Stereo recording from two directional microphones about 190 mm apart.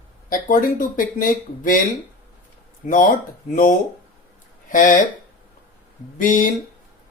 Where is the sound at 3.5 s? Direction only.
45° left (ahead or behind).